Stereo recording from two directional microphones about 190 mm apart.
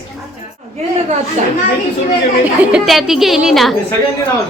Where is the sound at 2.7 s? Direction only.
Centre (ahead or behind).